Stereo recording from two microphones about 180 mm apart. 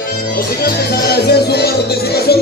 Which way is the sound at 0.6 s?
60° left (ahead or behind).